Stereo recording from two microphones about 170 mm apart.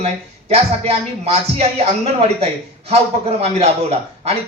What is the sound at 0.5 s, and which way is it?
Speech, 35° right (ahead or behind).